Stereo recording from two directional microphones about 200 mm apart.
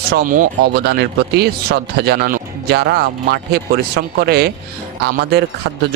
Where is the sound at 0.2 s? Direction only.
45° right (ahead or behind).